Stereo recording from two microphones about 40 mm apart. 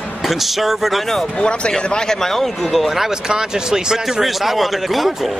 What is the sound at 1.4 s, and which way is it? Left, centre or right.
Speech, left.